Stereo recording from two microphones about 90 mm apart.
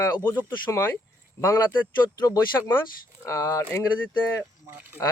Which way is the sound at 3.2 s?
35° left (ahead or behind).